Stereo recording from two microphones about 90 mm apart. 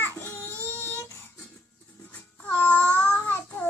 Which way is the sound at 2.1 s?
15° left (ahead or behind).